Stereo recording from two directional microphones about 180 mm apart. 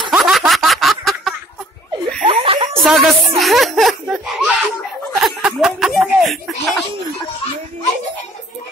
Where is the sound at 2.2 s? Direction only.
30° right (ahead or behind).